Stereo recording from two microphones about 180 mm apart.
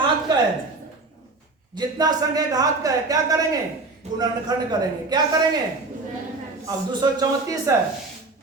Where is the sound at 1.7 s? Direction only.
20° right (ahead or behind).